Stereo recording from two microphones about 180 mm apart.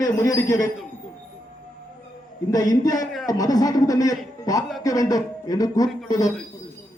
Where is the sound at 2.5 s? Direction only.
20° left (ahead or behind).